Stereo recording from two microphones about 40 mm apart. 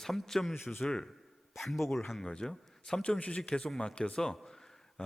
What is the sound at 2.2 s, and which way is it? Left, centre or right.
Speech, centre.